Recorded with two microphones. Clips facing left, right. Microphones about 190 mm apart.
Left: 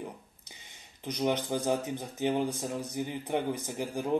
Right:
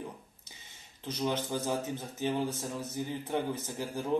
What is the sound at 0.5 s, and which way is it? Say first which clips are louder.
Speech: left 2 dB; 15° left (ahead or behind).